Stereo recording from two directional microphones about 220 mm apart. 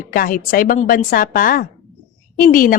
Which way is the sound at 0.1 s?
40° left (ahead or behind).